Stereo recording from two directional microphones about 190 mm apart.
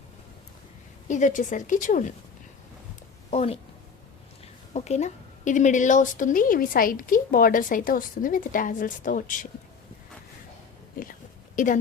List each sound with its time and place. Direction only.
1.0 s a woman's voice: 40° left (ahead or behind)
3.2 s a woman's voice: 35° left (ahead or behind)
4.7 s a woman's voice: 35° left (ahead or behind)
10.9 s a sound: 50° left (ahead or behind)